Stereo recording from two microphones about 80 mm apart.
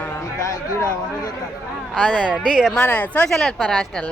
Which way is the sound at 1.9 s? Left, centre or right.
Centre.